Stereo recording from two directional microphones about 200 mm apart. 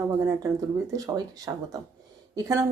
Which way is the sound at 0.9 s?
20° right (ahead or behind).